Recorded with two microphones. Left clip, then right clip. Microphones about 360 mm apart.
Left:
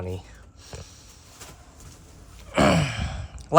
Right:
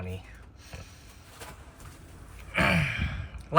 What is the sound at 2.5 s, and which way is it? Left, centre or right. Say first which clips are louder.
Sigh: left 5 dB; centre.